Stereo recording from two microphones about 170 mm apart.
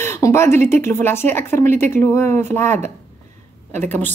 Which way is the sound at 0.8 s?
15° left (ahead or behind).